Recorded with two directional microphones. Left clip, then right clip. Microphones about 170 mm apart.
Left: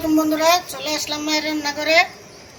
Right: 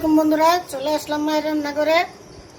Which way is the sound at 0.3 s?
75° right (ahead or behind).